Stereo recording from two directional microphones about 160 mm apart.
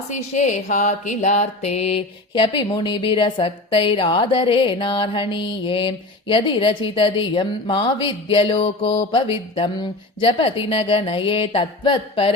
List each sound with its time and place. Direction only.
0.1 s mantra: 50° left (ahead or behind)